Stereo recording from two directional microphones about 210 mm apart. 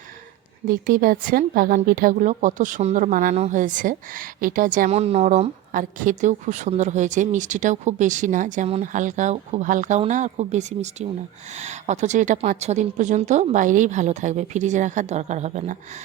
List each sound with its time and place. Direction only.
0.7 s a woman's voice: 40° right (ahead or behind)